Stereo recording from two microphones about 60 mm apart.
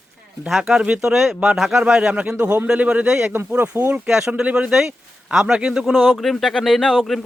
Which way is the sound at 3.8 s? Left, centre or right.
Right.